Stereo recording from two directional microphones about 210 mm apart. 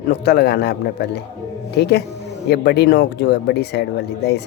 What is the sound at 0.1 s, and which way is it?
Speech, 50° left (ahead or behind).